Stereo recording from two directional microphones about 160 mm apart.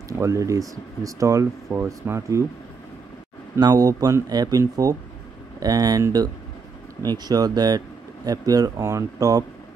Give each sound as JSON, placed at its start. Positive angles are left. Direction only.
{"t": 0.2, "sound": "speech", "side_deg": -20}
{"t": 3.5, "sound": "speech", "side_deg": -25}